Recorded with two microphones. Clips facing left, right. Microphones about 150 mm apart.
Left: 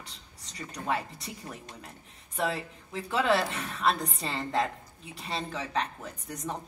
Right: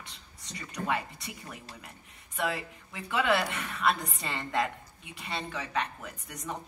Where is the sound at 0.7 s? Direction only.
35° left (ahead or behind).